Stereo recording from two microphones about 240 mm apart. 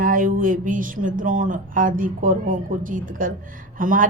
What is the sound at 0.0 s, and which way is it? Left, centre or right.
A woman's voice, right.